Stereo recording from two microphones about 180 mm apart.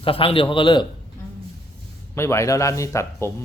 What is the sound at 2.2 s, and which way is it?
Speech, 15° left (ahead or behind).